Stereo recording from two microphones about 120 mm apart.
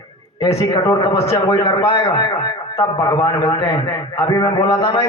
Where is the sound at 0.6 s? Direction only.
40° left (ahead or behind).